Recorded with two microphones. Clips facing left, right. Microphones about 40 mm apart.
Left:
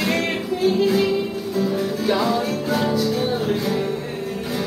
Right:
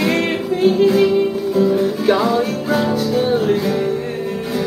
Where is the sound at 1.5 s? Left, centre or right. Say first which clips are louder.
Right 6 dB; right.